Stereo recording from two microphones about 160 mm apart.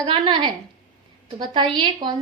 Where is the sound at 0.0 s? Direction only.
30° right (ahead or behind).